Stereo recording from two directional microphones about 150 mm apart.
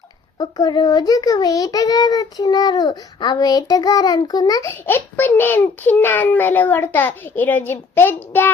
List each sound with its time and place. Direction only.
0.3 s a child's voice: 25° left (ahead or behind)